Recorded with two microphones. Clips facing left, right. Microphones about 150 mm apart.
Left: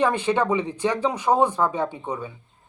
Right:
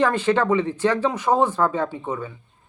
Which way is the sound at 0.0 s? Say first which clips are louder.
Right 2 dB; 15° left (ahead or behind).